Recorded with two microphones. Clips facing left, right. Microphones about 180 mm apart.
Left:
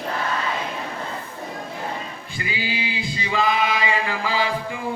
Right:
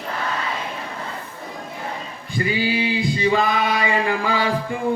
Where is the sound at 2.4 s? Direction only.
45° right (ahead or behind).